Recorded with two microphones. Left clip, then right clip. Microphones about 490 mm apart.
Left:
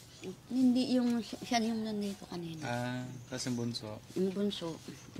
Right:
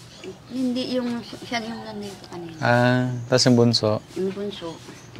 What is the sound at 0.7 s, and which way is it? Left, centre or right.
Speech, left.